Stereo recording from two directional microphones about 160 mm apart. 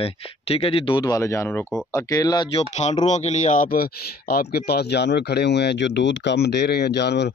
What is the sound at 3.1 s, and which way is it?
Speech, 45° left (ahead or behind).